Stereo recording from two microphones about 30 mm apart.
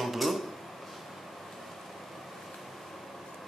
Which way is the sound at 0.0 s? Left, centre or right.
Centre.